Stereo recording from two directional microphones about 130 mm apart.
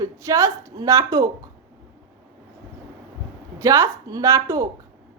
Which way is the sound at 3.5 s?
25° right (ahead or behind).